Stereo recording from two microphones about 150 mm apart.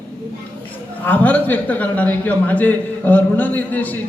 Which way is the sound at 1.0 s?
10° left (ahead or behind).